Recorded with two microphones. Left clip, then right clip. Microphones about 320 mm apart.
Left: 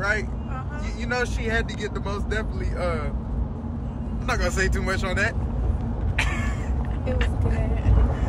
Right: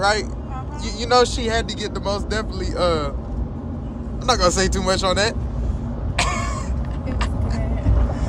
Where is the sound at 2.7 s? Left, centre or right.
Right.